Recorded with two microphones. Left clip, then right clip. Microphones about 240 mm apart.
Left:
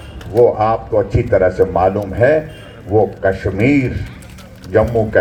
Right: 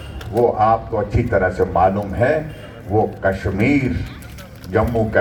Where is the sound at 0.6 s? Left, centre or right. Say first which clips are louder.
Left 2 dB; left.